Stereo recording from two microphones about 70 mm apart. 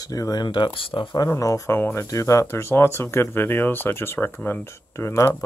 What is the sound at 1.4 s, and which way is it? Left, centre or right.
Speech, left.